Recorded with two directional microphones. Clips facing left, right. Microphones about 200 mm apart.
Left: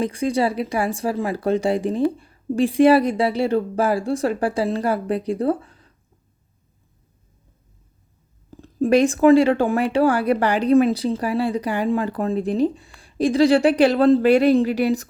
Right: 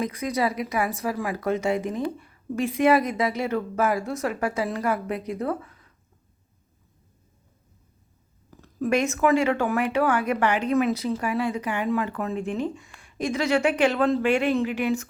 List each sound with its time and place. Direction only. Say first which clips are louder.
0.0 s speech: left 5 dB; 30° left (ahead or behind)
8.4 s speech: left 6 dB; 30° left (ahead or behind)